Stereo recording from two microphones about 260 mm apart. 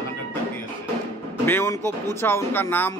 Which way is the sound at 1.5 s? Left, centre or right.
Centre.